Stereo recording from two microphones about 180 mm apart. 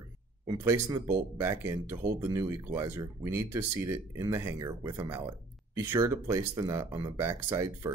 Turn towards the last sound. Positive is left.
turn(degrees=-15)  # may be behind; listen again after turning